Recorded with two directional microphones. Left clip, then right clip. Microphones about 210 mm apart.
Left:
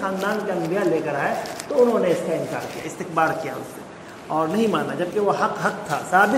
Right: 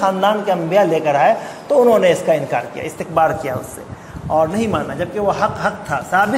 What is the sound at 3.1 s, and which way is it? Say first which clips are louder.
A man's voice: right 6 dB; 45° right (ahead or behind).